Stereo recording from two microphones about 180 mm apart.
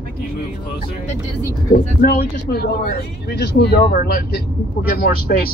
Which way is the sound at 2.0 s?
55° left (ahead or behind).